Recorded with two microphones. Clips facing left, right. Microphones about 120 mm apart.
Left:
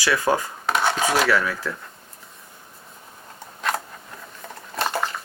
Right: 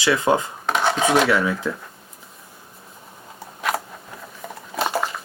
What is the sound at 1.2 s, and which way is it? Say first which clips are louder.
Speech: right 2 dB; 20° right (ahead or behind).